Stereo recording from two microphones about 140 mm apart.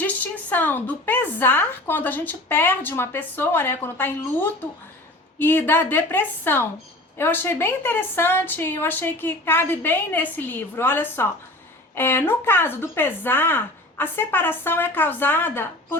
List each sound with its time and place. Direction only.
0.0 s speech: 10° left (ahead or behind)